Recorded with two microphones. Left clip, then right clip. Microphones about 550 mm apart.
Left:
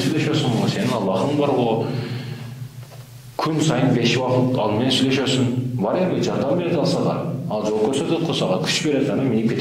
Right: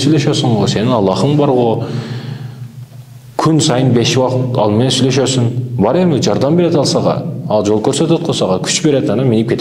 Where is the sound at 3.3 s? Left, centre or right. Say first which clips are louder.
Right 8 dB; right.